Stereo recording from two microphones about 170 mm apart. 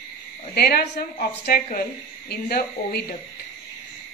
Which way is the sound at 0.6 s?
70° left (ahead or behind).